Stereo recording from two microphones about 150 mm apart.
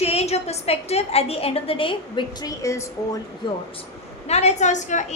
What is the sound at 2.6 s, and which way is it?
Speech, 20° left (ahead or behind).